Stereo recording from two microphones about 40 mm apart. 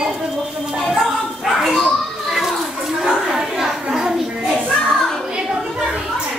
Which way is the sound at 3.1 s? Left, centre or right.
Centre.